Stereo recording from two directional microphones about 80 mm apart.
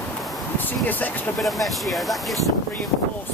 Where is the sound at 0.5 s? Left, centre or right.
Left.